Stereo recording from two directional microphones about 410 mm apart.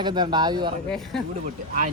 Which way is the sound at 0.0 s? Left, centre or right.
Centre.